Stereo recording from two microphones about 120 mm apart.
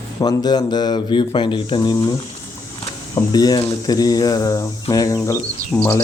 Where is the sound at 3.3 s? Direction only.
35° left (ahead or behind).